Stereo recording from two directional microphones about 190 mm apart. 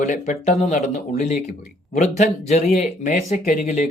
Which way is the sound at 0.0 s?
40° left (ahead or behind).